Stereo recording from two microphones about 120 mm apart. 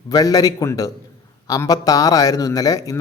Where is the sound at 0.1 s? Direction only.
30° left (ahead or behind).